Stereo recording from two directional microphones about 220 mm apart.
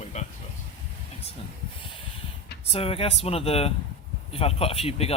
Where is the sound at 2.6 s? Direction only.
25° left (ahead or behind).